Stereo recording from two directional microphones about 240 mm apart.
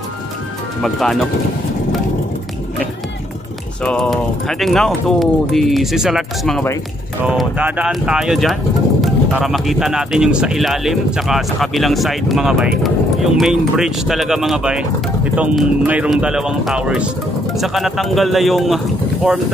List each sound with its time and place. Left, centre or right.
0.8 s speech: centre
3.8 s speech: centre